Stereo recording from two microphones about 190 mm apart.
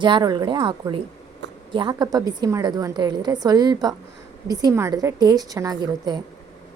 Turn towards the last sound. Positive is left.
turn(degrees=-20)  # may be behind; listen again after turning